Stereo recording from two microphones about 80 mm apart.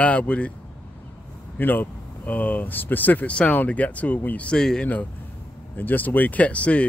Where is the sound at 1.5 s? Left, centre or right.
Left.